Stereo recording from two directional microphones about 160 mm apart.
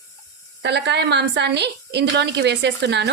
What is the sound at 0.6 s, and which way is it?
Speech, 90° right.